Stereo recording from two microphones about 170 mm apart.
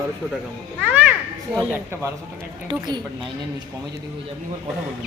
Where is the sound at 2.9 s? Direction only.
25° right (ahead or behind).